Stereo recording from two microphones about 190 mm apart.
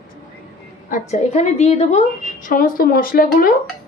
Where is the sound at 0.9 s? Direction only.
35° left (ahead or behind).